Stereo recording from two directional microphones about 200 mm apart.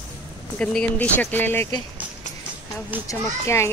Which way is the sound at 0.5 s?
5° left (ahead or behind).